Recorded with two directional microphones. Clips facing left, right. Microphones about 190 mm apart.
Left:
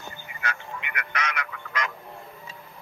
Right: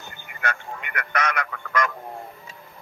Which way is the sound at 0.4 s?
50° right (ahead or behind).